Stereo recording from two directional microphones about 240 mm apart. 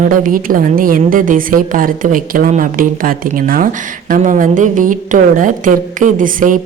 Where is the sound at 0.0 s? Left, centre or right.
Right.